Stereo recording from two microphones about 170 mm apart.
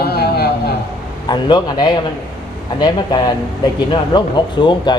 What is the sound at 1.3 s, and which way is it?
Speech, 25° left (ahead or behind).